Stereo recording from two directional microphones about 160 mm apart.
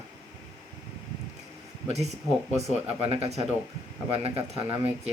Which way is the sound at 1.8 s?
45° right (ahead or behind).